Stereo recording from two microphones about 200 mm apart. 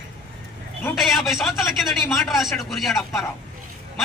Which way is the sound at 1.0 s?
Centre (ahead or behind).